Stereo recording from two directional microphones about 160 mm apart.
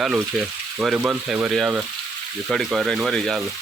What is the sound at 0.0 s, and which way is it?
Speech, 5° right (ahead or behind).